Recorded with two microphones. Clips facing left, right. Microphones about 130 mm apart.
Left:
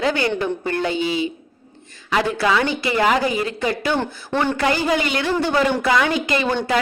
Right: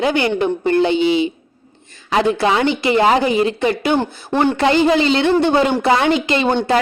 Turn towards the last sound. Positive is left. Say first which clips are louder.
# right 4 dB
turn(degrees=-25)  # may be behind; listen again after turning